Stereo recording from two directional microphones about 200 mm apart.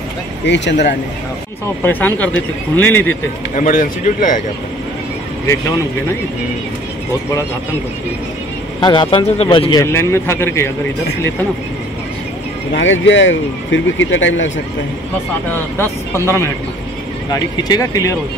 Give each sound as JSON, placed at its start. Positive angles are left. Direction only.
{"t": 0.5, "sound": "speech", "side_deg": 60}
{"t": 1.8, "sound": "a man's voice", "side_deg": 10}
{"t": 3.5, "sound": "speech", "side_deg": 40}
{"t": 8.8, "sound": "a man's voice", "side_deg": 25}
{"t": 12.7, "sound": "speech", "side_deg": 70}
{"t": 15.8, "sound": "a man's voice", "side_deg": 10}